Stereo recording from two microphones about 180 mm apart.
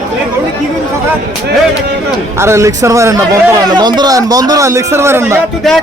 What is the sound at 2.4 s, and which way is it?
A man's voice, 15° right (ahead or behind).